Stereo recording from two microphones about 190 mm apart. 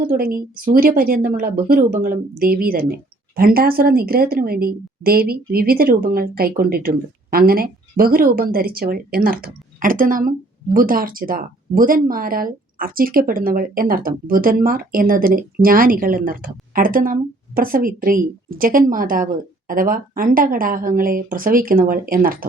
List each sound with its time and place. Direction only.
0.0 s speech: 50° right (ahead or behind)